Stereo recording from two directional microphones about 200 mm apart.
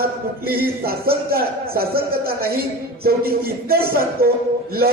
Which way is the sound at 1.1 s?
50° right (ahead or behind).